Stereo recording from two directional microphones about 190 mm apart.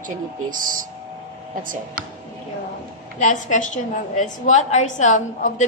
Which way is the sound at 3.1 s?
40° left (ahead or behind).